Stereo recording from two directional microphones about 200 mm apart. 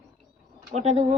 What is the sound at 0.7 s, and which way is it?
Speech, 35° right (ahead or behind).